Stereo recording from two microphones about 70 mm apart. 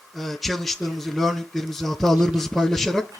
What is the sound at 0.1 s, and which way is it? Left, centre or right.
A man's voice, centre.